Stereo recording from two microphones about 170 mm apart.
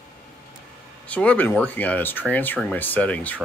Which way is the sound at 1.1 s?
10° left (ahead or behind).